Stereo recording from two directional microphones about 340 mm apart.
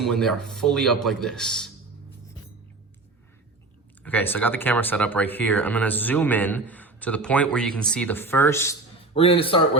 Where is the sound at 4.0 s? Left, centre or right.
Centre.